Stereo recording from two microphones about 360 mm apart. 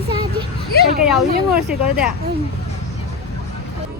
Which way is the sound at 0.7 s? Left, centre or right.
Left.